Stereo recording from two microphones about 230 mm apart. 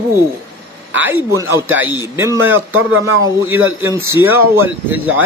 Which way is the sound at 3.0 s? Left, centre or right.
Centre.